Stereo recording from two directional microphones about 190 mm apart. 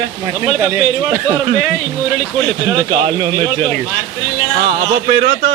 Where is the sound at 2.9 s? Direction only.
25° right (ahead or behind).